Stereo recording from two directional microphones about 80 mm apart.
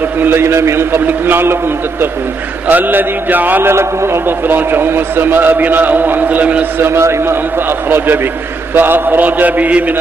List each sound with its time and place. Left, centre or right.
0.2 s a man's voice: right
6.8 s a man's voice: right
8.7 s a man's voice: right